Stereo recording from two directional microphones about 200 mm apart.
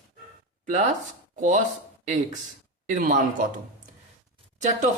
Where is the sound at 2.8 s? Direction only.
40° right (ahead or behind).